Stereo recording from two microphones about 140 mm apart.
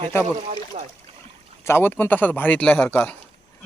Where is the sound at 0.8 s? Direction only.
45° right (ahead or behind).